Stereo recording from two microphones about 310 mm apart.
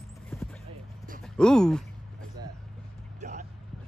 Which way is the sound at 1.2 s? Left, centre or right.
Centre.